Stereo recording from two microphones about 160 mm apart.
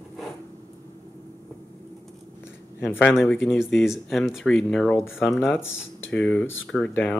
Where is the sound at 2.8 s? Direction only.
15° left (ahead or behind).